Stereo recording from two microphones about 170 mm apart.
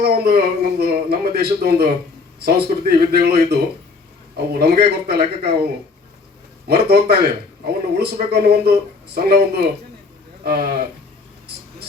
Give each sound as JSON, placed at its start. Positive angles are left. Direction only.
{"t": 0.0, "sound": "speech", "side_deg": -65}
{"t": 6.7, "sound": "speech", "side_deg": -70}